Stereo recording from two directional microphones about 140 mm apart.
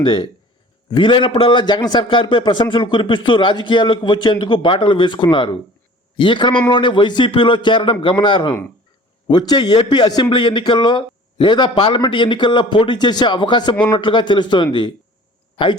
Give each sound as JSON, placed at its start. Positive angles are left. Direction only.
{"t": 0.0, "sound": "a man's voice", "side_deg": 35}